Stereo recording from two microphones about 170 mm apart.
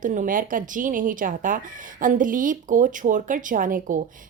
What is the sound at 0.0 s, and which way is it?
Speech, 50° right (ahead or behind).